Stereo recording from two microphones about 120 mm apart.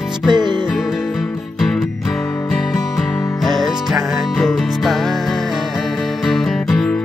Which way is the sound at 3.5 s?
Centre (ahead or behind).